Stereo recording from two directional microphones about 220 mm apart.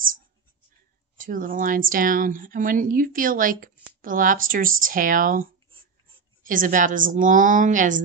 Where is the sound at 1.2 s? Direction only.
40° right (ahead or behind).